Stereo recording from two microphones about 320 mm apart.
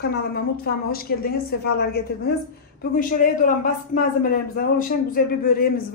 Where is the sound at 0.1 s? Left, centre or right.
Left.